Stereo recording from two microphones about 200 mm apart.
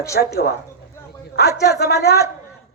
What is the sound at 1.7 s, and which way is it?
Speech, 55° left (ahead or behind).